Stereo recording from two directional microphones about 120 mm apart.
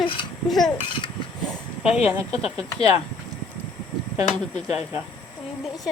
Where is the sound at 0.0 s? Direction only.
45° left (ahead or behind).